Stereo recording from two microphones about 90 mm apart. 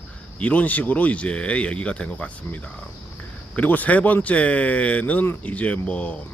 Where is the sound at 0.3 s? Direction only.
15° left (ahead or behind).